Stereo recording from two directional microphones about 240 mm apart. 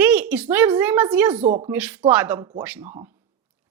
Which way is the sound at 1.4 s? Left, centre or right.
Right.